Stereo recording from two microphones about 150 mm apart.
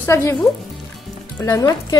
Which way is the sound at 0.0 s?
15° left (ahead or behind).